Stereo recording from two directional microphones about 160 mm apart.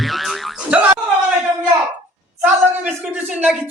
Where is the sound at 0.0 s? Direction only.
Centre (ahead or behind).